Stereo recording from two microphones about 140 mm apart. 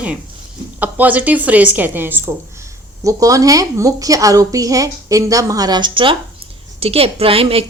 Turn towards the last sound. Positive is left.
turn(degrees=-45)  # may be behind; listen again after turning